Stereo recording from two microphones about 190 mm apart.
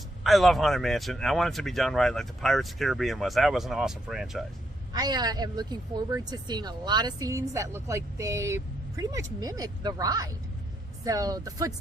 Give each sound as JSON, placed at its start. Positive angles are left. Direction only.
{"t": 0.3, "sound": "speech", "side_deg": 0}
{"t": 4.9, "sound": "a woman's voice", "side_deg": -20}